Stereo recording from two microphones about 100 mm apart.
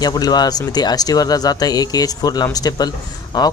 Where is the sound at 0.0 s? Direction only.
40° left (ahead or behind).